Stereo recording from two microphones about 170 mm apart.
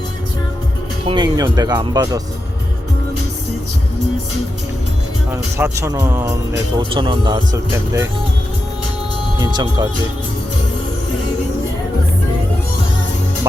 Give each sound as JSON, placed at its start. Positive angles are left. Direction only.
{"t": 1.0, "sound": "speech", "side_deg": -25}
{"t": 5.5, "sound": "speech", "side_deg": -15}
{"t": 9.4, "sound": "speech", "side_deg": -25}